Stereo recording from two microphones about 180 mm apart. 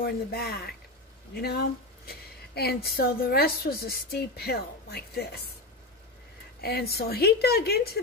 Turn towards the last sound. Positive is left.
turn(degrees=60)  # may be behind; listen again after turning